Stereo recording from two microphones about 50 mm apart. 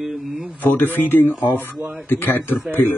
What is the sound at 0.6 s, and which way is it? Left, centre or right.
Speech, left.